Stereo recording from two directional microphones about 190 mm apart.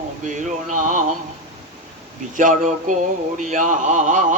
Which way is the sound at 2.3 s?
40° right (ahead or behind).